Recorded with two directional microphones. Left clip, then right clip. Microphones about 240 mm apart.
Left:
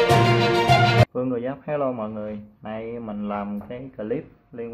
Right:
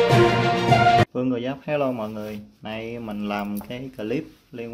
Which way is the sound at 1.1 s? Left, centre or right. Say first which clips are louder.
Even; centre.